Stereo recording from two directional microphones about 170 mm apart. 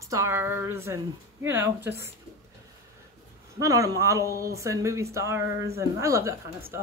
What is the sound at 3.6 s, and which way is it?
Speech, 20° right (ahead or behind).